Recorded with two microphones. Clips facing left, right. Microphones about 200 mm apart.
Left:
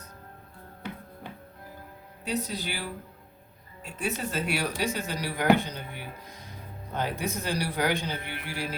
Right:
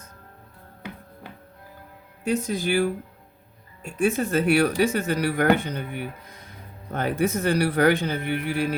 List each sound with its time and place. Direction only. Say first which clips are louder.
2.2 s speech: right 7 dB; 50° right (ahead or behind)